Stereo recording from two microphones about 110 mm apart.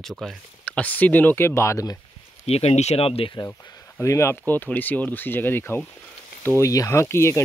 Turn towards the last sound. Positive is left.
turn(degrees=25)  # may be behind; listen again after turning